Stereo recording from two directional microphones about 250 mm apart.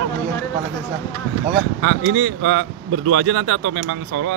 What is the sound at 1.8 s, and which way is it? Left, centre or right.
Speech, right.